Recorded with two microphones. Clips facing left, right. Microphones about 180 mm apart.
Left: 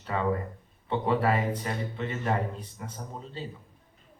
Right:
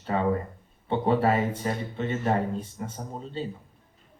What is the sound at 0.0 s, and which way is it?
Speech, 30° right (ahead or behind).